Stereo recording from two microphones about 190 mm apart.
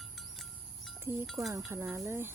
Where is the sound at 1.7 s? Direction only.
15° right (ahead or behind).